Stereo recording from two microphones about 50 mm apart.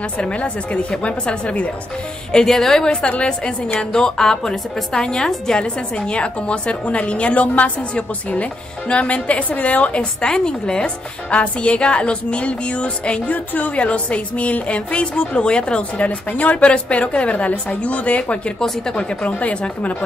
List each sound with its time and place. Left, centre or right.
0.2 s a woman's voice: left
2.3 s a woman's voice: centre; by 20.0 s left